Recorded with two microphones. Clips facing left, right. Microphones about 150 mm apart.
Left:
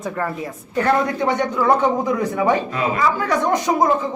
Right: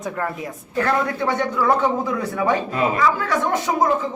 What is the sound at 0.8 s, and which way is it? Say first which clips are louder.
A man's voice: left 3 dB; 20° left (ahead or behind).